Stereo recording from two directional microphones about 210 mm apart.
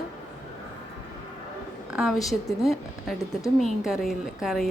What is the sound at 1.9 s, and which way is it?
A woman's voice, centre (ahead or behind).